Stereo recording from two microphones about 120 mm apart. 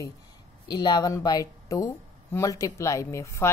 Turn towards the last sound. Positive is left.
turn(degrees=25)  # may be behind; listen again after turning